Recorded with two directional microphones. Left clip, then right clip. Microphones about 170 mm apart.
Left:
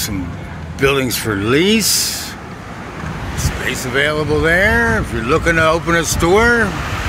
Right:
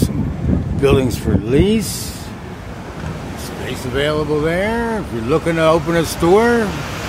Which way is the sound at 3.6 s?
Centre (ahead or behind).